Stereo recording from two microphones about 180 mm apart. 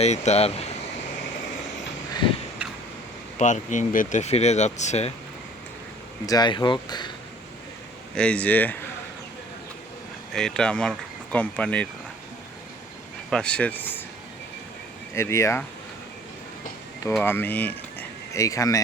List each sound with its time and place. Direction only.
0.0 s speech: 40° left (ahead or behind)
3.3 s speech: 45° left (ahead or behind)
6.2 s speech: 25° left (ahead or behind)
8.1 s speech: 5° left (ahead or behind)
10.3 s speech: 5° left (ahead or behind)
13.3 s speech: 5° left (ahead or behind)
15.1 s speech: 15° left (ahead or behind)
17.2 s speech: 10° left (ahead or behind)